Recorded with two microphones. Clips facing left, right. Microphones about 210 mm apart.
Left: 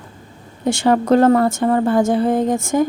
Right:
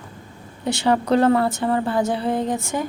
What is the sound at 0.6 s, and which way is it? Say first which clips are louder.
A woman's voice: left 4 dB; 45° left (ahead or behind).